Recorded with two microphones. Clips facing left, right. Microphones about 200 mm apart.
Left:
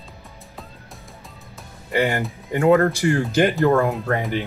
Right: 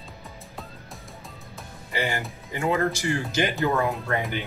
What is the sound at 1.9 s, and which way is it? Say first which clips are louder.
Speech: left 7 dB; 55° left (ahead or behind).